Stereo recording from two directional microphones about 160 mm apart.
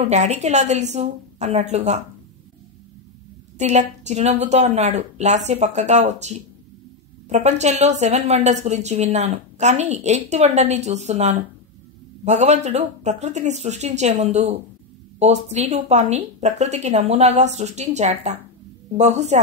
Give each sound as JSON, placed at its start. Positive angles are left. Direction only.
{"t": 0.0, "sound": "a woman's voice", "side_deg": -45}
{"t": 3.5, "sound": "a woman's voice", "side_deg": -45}